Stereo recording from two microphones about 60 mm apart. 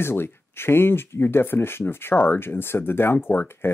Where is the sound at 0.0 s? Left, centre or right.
Left.